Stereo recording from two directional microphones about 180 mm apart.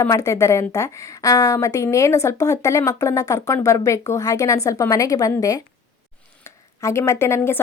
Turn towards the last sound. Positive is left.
turn(degrees=15)  # may be behind; listen again after turning